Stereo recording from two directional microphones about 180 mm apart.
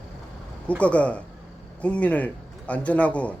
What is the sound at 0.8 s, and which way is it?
Speech, 5° left (ahead or behind).